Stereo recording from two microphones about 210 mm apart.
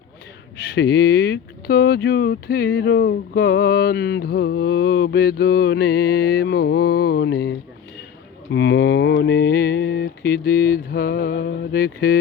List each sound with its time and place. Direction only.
0.8 s speech: 50° left (ahead or behind)
8.4 s mantra: 55° left (ahead or behind)